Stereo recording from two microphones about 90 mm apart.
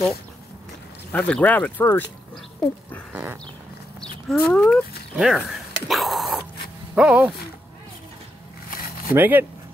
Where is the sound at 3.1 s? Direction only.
25° right (ahead or behind).